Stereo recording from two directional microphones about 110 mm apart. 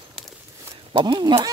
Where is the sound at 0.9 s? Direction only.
45° right (ahead or behind).